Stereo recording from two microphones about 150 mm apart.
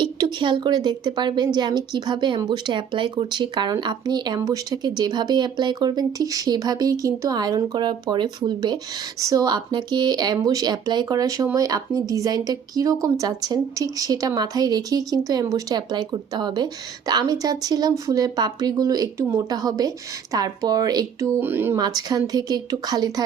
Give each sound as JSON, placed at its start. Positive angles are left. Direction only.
{"t": 0.0, "sound": "a woman's voice", "side_deg": -30}
{"t": 21.4, "sound": "speech", "side_deg": -15}
{"t": 21.8, "sound": "a woman's voice", "side_deg": -25}